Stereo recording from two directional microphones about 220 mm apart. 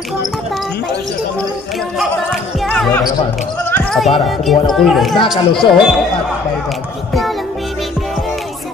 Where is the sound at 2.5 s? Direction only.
Centre (ahead or behind).